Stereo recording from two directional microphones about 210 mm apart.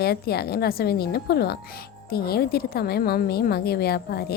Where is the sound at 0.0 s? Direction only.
50° left (ahead or behind).